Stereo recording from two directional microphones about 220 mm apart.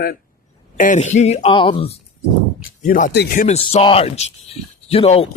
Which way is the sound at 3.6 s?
25° left (ahead or behind).